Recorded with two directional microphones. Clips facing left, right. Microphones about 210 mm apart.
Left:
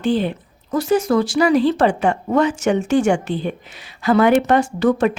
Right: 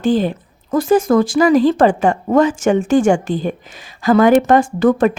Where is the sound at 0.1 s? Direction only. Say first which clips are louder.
Right 3 dB; 45° right (ahead or behind).